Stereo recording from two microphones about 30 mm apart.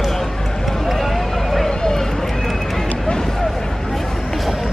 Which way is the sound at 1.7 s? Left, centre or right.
Centre.